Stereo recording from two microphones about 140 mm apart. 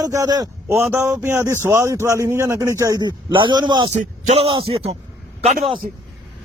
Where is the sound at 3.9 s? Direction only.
50° right (ahead or behind).